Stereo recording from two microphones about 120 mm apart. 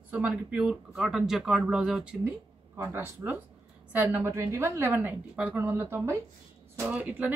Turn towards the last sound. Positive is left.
turn(degrees=-10)  # may be behind; listen again after turning